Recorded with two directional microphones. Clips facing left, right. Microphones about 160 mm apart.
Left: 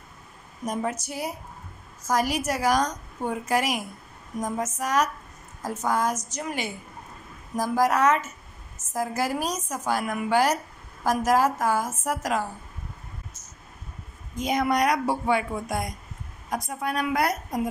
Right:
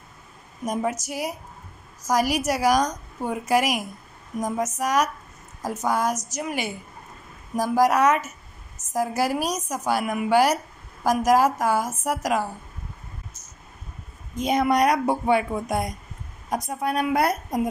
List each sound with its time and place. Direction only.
1.0 s a woman's voice: 10° right (ahead or behind)
14.4 s speech: 25° right (ahead or behind)